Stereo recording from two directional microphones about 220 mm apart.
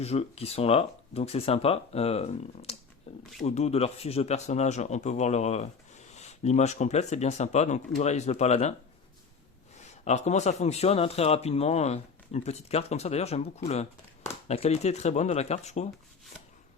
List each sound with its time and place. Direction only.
0.0 s a man's voice: 30° left (ahead or behind)
3.1 s a sound: 25° left (ahead or behind)
3.4 s speech: 30° left (ahead or behind)
9.7 s a man's voice: 30° left (ahead or behind)